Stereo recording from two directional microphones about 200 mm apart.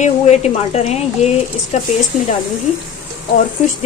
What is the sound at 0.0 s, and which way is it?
Speech, 35° left (ahead or behind).